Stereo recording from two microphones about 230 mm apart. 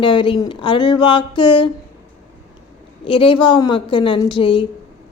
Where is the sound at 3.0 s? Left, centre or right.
Left.